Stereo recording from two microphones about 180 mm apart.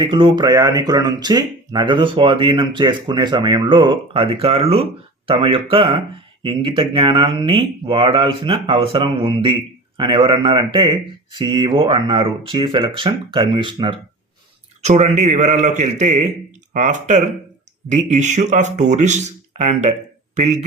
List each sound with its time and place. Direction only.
0.0 s speech: 25° right (ahead or behind)
14.8 s speech: 40° right (ahead or behind)